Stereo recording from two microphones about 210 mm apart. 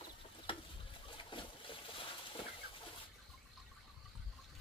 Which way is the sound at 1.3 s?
25° left (ahead or behind).